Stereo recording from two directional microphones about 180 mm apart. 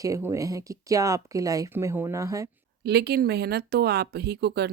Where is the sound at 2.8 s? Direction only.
65° right (ahead or behind).